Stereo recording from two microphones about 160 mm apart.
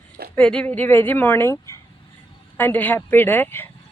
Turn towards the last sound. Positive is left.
turn(degrees=15)  # may be behind; listen again after turning